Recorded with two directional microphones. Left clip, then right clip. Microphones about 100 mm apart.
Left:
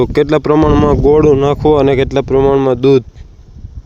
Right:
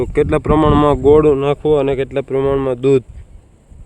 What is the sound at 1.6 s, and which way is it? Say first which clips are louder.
Speech: left 5 dB; 65° left (ahead or behind).